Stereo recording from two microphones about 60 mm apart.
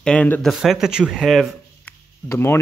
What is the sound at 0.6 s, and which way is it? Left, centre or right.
Speech, centre.